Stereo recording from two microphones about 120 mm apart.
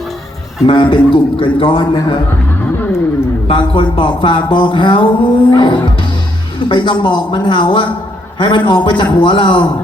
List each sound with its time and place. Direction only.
0.7 s speech: 45° left (ahead or behind)
3.4 s speech: 45° left (ahead or behind)